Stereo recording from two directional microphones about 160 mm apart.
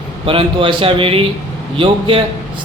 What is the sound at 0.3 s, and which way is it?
A man's voice, 35° right (ahead or behind).